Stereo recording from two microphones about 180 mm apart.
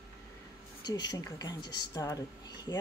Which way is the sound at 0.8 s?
25° left (ahead or behind).